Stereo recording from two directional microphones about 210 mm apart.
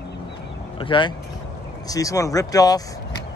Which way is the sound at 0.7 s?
25° left (ahead or behind).